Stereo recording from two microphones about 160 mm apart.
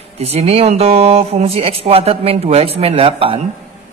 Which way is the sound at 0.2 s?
40° right (ahead or behind).